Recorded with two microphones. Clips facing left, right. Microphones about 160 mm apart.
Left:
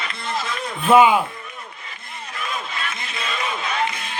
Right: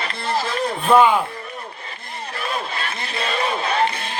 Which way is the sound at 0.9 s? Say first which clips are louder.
Left 1 dB; 5° left (ahead or behind).